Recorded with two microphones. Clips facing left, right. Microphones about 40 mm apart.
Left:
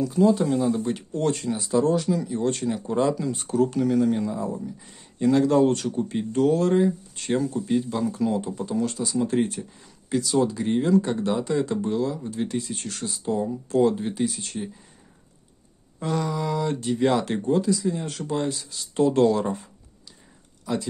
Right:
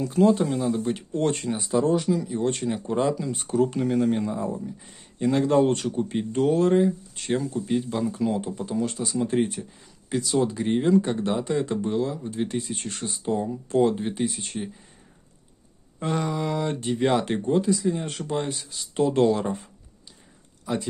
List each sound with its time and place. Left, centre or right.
0.0 s speech: right
0.5 s speech: centre
1.1 s speech: right; by 3.4 s centre
3.4 s speech: centre
4.8 s speech: centre
16.0 s speech: right